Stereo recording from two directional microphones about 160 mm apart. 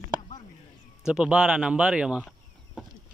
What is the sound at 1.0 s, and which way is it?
Speech, 5° right (ahead or behind).